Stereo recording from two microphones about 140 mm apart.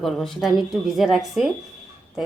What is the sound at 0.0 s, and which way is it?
A woman's voice, centre (ahead or behind).